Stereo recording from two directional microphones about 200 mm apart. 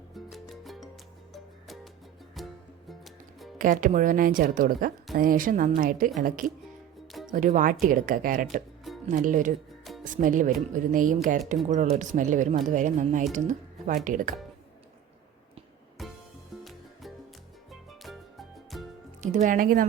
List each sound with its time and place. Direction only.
0.1 s music: centre (ahead or behind)
3.6 s speech: 40° right (ahead or behind)
16.0 s music: centre (ahead or behind)
17.7 s music: centre (ahead or behind)
19.2 s speech: 40° right (ahead or behind)